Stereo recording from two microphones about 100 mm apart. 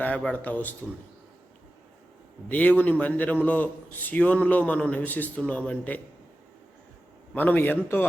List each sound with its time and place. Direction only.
0.0 s a man's voice: 10° left (ahead or behind)
2.5 s a man's voice: 15° left (ahead or behind)
7.3 s a man's voice: 20° left (ahead or behind)